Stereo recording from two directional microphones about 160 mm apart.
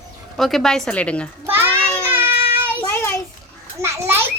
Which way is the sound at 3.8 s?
15° right (ahead or behind).